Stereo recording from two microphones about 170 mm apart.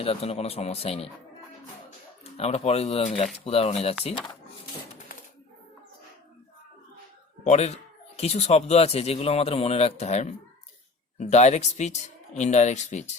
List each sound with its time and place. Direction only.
0.0 s speech: 35° left (ahead or behind)
2.4 s speech: 35° left (ahead or behind)
7.4 s speech: 40° left (ahead or behind)